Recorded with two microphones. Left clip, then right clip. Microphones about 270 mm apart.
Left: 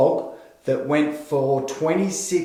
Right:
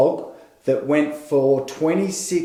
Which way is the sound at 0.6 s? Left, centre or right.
Right.